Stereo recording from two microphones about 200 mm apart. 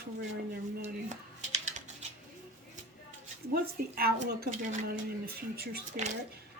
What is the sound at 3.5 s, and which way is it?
Speech, 50° right (ahead or behind).